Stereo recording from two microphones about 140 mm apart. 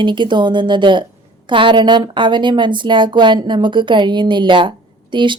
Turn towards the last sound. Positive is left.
turn(degrees=-35)  # may be behind; listen again after turning